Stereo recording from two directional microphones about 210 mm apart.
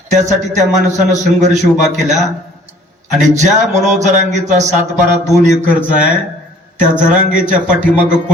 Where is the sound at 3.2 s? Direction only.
35° right (ahead or behind).